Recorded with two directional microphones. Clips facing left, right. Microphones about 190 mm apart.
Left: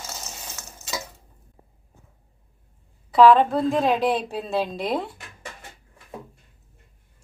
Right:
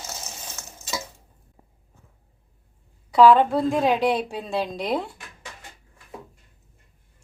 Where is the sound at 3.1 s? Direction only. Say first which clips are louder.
Even; centre (ahead or behind).